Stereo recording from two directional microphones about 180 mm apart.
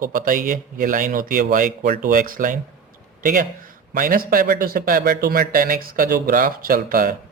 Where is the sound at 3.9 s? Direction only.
50° right (ahead or behind).